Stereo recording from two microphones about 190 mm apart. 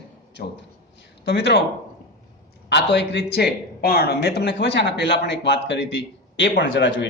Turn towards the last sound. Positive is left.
turn(degrees=75)  # may be behind; listen again after turning